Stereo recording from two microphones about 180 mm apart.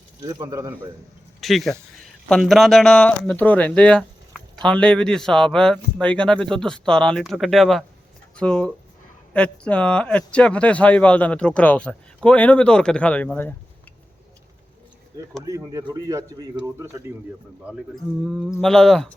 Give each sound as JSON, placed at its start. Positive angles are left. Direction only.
{"t": 0.2, "sound": "a man's voice", "side_deg": -20}
{"t": 1.4, "sound": "speech", "side_deg": 0}
{"t": 15.4, "sound": "a man's voice", "side_deg": -20}
{"t": 18.3, "sound": "speech", "side_deg": -5}